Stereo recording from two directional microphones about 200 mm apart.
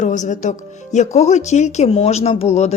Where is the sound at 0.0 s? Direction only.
40° left (ahead or behind).